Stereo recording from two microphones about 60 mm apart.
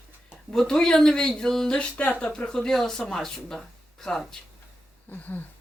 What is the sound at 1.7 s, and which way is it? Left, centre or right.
Speech, centre.